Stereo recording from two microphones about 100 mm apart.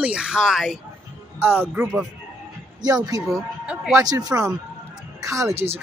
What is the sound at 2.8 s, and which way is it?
Speech, 40° right (ahead or behind).